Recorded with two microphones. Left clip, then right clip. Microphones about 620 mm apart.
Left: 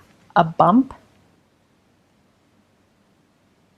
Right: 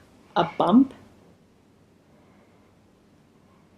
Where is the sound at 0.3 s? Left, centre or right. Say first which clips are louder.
Left 7 dB; left.